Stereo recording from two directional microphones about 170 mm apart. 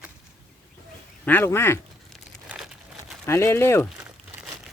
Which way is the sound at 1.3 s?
15° left (ahead or behind).